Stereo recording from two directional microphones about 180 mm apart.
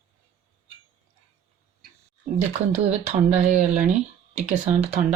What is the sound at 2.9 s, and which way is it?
Speech, 40° right (ahead or behind).